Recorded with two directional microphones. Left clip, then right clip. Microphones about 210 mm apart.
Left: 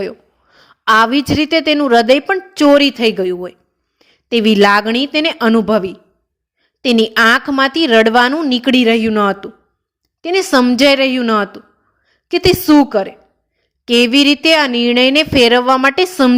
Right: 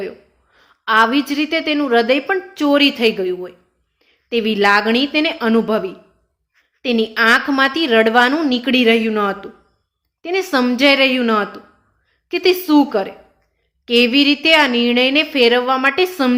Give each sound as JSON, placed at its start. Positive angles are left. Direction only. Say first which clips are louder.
{"t": 0.0, "sound": "a woman's voice", "louder": "left 5 dB", "side_deg": 45}